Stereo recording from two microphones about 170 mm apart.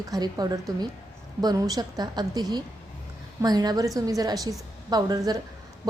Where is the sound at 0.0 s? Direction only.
20° right (ahead or behind).